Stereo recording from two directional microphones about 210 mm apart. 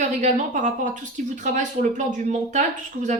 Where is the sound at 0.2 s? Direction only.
35° right (ahead or behind).